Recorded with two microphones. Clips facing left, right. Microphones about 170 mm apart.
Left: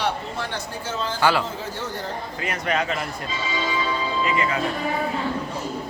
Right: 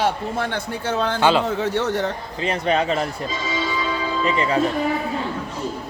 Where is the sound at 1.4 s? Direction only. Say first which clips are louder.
Right 9 dB; 70° right (ahead or behind).